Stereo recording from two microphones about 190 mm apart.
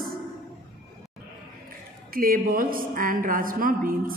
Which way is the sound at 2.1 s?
50° right (ahead or behind).